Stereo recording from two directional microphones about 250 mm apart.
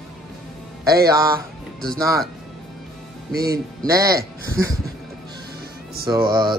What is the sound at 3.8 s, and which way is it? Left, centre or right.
Speech, centre.